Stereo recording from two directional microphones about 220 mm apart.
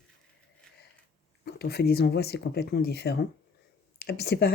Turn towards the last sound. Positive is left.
turn(degrees=45)  # may be behind; listen again after turning